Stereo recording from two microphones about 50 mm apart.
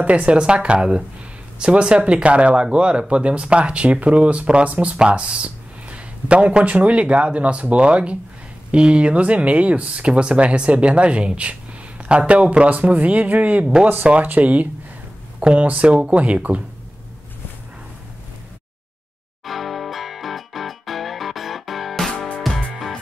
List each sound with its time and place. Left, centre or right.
0.0 s speech: right
19.4 s music: centre